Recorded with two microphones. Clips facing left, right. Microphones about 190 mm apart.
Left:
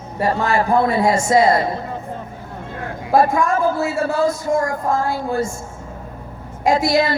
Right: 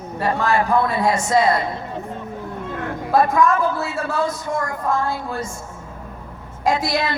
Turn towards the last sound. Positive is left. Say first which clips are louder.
# left 4 dB
turn(degrees=30)  # may be behind; listen again after turning